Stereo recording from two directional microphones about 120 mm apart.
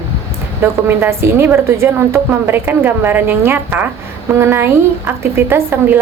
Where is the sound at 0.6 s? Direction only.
20° right (ahead or behind).